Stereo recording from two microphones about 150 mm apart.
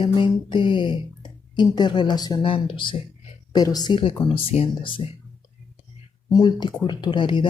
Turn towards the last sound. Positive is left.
turn(degrees=30)  # may be behind; listen again after turning